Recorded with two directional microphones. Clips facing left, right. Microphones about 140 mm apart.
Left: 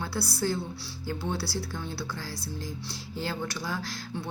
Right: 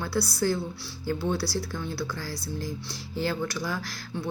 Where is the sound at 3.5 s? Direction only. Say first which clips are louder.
Right 2 dB; 30° left (ahead or behind).